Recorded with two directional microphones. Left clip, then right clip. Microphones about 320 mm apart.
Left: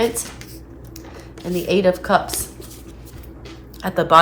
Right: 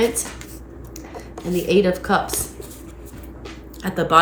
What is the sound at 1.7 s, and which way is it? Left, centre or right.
Speech, centre.